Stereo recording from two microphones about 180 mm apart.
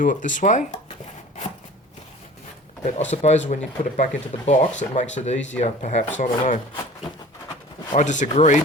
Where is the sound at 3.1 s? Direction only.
40° left (ahead or behind).